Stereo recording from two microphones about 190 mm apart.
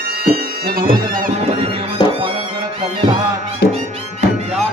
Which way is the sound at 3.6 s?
55° left (ahead or behind).